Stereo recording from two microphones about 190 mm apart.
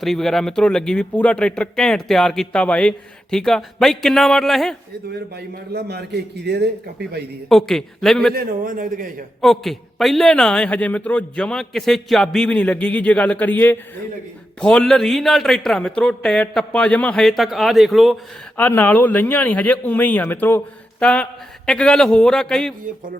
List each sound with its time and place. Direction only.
0.0 s speech: centre (ahead or behind)
5.7 s a man's voice: 60° right (ahead or behind)
7.5 s speech: centre (ahead or behind)
8.4 s a man's voice: 45° right (ahead or behind)
9.4 s speech: centre (ahead or behind)